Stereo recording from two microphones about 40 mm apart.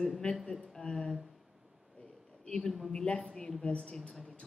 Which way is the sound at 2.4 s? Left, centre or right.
Centre.